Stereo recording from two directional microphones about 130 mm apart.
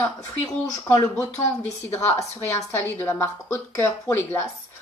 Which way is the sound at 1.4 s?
20° left (ahead or behind).